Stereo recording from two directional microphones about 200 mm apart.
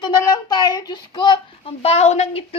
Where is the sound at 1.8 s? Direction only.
30° left (ahead or behind).